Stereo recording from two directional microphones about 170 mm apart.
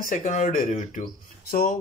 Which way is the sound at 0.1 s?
45° left (ahead or behind).